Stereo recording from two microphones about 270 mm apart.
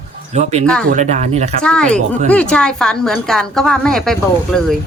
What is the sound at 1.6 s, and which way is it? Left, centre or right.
A woman's voice, centre.